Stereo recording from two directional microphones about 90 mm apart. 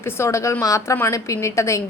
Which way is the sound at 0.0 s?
30° left (ahead or behind).